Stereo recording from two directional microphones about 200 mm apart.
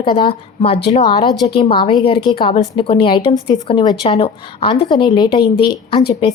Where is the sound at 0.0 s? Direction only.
25° left (ahead or behind).